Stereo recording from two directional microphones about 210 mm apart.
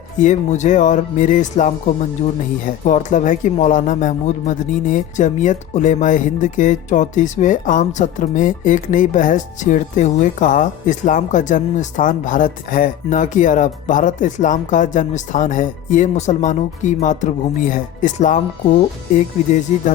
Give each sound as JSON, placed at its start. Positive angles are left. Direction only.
{"t": 0.2, "sound": "a man's voice", "side_deg": 35}